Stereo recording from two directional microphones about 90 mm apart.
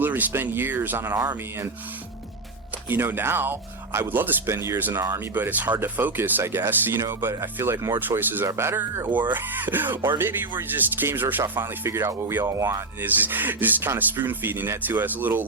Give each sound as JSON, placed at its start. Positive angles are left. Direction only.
{"t": 0.0, "sound": "speech", "side_deg": -20}
{"t": 2.9, "sound": "speech", "side_deg": -25}
{"t": 13.0, "sound": "speech", "side_deg": -20}